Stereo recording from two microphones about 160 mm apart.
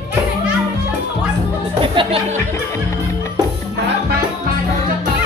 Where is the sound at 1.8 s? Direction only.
30° right (ahead or behind).